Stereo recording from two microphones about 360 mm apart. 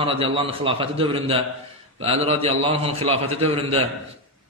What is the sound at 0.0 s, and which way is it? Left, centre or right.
A man's voice, centre.